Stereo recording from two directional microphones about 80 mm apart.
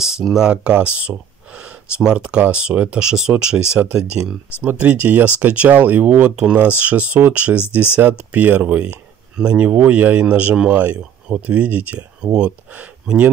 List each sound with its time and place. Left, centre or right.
0.0 s speech: centre